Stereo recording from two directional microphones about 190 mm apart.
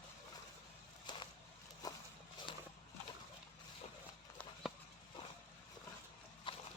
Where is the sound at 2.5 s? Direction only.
25° left (ahead or behind).